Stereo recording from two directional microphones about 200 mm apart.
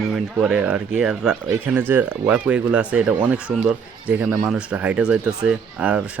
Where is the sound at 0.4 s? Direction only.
5° right (ahead or behind).